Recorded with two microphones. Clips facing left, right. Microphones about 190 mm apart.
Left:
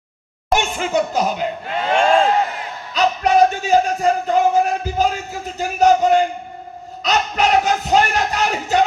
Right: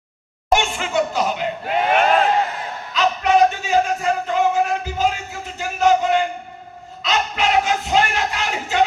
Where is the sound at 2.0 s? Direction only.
25° left (ahead or behind).